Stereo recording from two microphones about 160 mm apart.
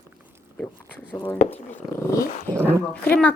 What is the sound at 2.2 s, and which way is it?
Speech, 60° left (ahead or behind).